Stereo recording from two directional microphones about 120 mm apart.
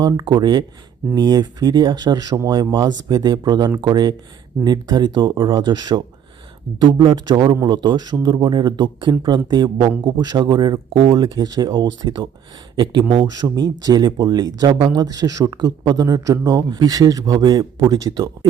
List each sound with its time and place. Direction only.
0.0 s speech: 35° right (ahead or behind)